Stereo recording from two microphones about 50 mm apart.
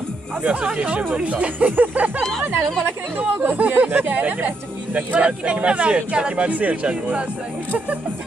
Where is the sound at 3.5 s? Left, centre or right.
Right.